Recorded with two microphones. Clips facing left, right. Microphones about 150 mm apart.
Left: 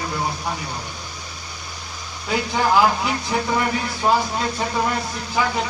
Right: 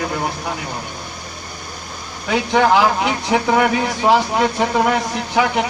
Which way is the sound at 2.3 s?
75° right (ahead or behind).